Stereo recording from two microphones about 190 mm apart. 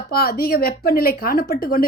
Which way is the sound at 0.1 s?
55° left (ahead or behind).